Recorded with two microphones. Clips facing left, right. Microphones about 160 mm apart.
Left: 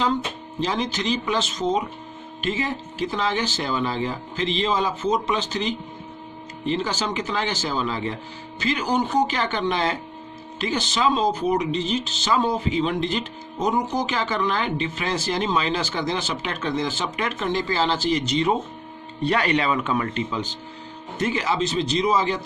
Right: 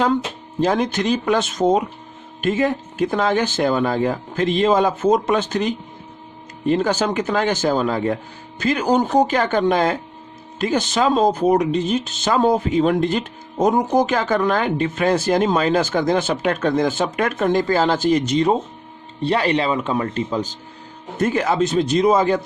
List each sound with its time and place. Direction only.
0.6 s speech: 50° right (ahead or behind)
19.2 s speech: 30° right (ahead or behind); by 22.4 s 50° right (ahead or behind)